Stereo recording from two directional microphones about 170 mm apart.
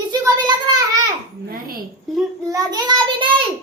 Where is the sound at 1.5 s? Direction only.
60° right (ahead or behind).